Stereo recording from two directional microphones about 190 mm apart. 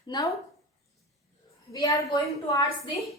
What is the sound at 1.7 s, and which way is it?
Speech, 15° left (ahead or behind).